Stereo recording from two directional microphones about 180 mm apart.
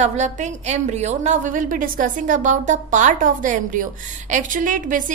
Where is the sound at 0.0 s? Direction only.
40° right (ahead or behind).